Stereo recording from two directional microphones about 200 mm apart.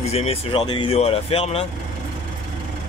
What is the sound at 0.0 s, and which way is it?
Speech, 30° left (ahead or behind).